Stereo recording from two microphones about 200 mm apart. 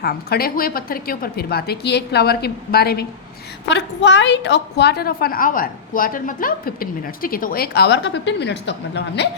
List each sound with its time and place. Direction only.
0.0 s a woman's voice: 50° left (ahead or behind)
3.7 s a woman's voice: 60° left (ahead or behind)